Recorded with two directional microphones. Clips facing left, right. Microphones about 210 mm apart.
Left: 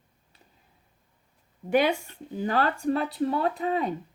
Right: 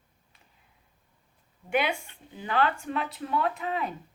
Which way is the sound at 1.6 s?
40° left (ahead or behind).